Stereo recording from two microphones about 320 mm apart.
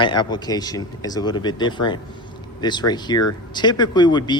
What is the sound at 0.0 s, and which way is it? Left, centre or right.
Speech, centre.